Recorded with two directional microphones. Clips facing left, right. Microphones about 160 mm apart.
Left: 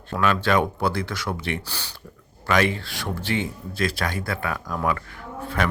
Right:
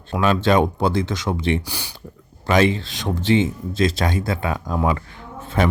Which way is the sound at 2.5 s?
25° right (ahead or behind).